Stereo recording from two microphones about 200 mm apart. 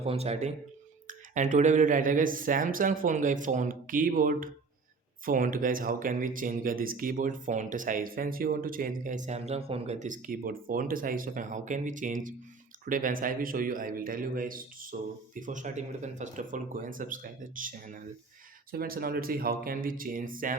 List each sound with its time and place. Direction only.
0.0 s speech: 30° right (ahead or behind)